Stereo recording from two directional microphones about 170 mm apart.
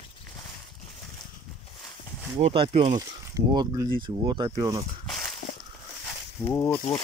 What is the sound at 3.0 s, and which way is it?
Speech, 20° right (ahead or behind).